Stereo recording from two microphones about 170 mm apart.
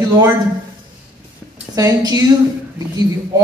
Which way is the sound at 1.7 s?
20° right (ahead or behind).